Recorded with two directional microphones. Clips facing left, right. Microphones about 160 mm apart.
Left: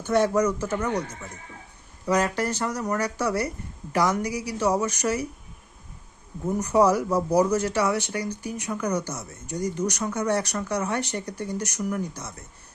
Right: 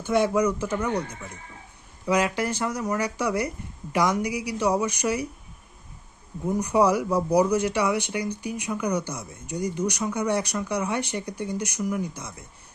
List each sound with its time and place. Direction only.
0.0 s speech: 10° right (ahead or behind)
2.0 s speech: 10° right (ahead or behind)
6.4 s speech: 10° right (ahead or behind)